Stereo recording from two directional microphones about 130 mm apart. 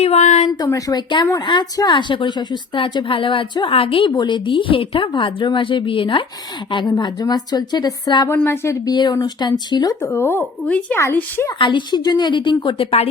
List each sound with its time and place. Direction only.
0.0 s speech: 60° left (ahead or behind)
0.6 s speech: 30° left (ahead or behind)
8.3 s a woman's voice: 20° left (ahead or behind); by 9.9 s 35° left (ahead or behind)
10.0 s a woman's voice: 15° left (ahead or behind)
11.6 s speech: 35° left (ahead or behind)